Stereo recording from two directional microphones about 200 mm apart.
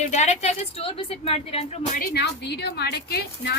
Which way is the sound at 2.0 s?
55° left (ahead or behind).